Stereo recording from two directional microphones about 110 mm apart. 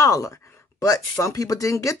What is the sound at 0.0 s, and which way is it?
Speech, 30° left (ahead or behind).